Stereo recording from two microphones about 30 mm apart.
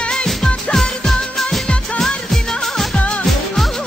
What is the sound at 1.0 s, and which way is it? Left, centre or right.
Music, centre.